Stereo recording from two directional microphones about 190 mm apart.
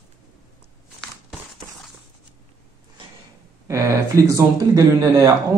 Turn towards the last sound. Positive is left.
turn(degrees=-20)  # may be behind; listen again after turning